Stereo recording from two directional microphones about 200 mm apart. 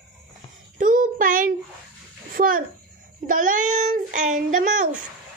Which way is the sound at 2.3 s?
45° right (ahead or behind).